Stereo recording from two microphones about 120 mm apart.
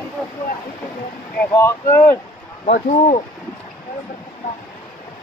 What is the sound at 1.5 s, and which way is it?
Speech, 25° left (ahead or behind).